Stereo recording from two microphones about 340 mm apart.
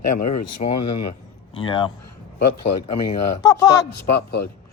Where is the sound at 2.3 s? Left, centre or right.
Left.